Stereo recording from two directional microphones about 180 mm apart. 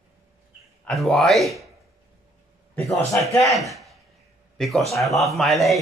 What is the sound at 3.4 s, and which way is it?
Speech, centre (ahead or behind).